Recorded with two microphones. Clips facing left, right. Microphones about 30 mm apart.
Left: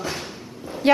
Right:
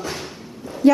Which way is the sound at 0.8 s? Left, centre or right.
Left.